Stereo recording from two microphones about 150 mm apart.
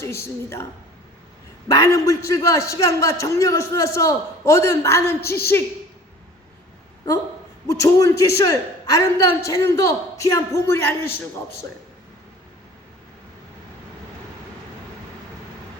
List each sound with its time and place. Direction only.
1.6 s a man's voice: 20° left (ahead or behind)
7.7 s a man's voice: 20° left (ahead or behind)